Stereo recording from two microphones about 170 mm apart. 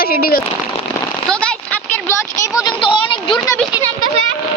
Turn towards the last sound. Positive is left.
turn(degrees=30)  # may be behind; listen again after turning